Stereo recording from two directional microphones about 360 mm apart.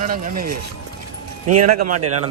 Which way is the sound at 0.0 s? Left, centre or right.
Right.